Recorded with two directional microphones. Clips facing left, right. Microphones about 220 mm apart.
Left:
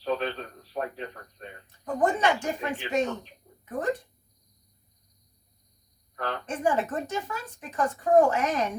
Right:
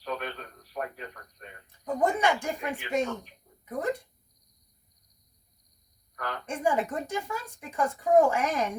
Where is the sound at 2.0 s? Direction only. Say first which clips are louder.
Left 1 dB; 10° right (ahead or behind).